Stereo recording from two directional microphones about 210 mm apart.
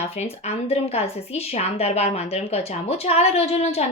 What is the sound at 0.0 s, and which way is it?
A woman's voice, 30° left (ahead or behind).